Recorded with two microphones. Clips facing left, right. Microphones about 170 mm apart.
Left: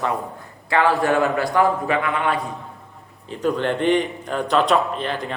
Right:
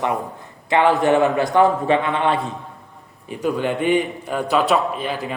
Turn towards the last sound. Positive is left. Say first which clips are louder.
# right 1 dB
turn(degrees=-5)  # may be behind; listen again after turning